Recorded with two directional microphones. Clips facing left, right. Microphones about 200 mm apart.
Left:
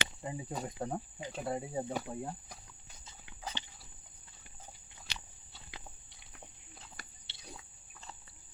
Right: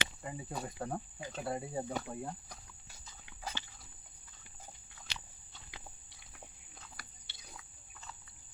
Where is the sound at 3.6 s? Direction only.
20° left (ahead or behind).